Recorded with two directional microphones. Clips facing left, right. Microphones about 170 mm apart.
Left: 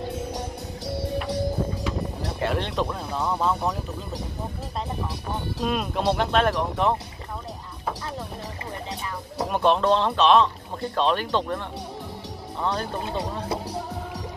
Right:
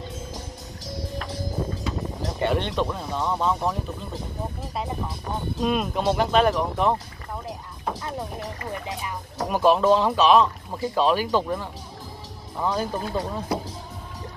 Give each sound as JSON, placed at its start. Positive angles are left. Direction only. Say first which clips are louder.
{"t": 0.1, "sound": "music", "louder": "left 6 dB", "side_deg": 65}
{"t": 2.4, "sound": "speech", "louder": "right 2 dB", "side_deg": 0}
{"t": 5.6, "sound": "speech", "louder": "right 2 dB", "side_deg": 0}
{"t": 9.5, "sound": "speech", "louder": "right 2 dB", "side_deg": -5}
{"t": 13.5, "sound": "music", "louder": "right 3 dB", "side_deg": 25}